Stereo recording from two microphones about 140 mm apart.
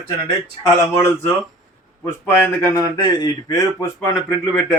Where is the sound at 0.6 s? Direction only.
20° left (ahead or behind).